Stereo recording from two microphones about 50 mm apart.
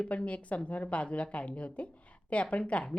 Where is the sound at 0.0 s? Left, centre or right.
Left.